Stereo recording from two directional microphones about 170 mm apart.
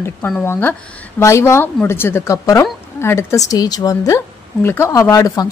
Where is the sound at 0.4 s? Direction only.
10° left (ahead or behind).